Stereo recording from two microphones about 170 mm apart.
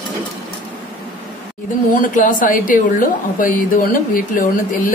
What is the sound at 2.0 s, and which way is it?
A woman's voice, 50° left (ahead or behind).